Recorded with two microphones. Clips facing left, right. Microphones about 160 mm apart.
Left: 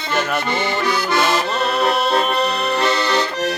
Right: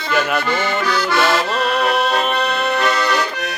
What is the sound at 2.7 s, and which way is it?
Accordion, 25° left (ahead or behind).